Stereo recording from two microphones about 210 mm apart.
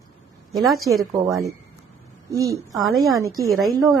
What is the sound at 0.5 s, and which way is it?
Speech, centre (ahead or behind).